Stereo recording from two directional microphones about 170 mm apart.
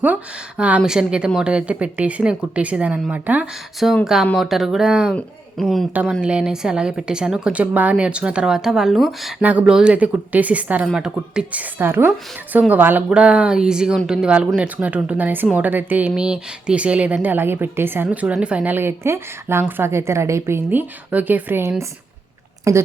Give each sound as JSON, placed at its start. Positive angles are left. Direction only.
{"t": 0.0, "sound": "a woman's voice", "side_deg": -10}